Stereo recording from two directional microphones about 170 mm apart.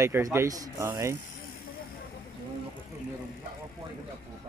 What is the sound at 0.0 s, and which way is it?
Speech, 15° right (ahead or behind).